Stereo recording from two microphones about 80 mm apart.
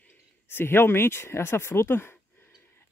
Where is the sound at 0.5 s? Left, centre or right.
Left.